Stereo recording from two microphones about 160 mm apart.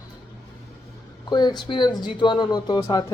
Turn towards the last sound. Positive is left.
turn(degrees=25)  # may be behind; listen again after turning